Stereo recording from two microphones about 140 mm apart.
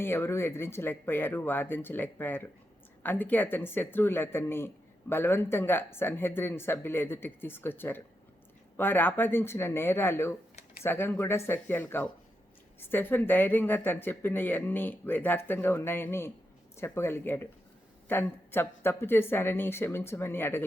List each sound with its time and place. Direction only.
0.0 s speech: 15° left (ahead or behind)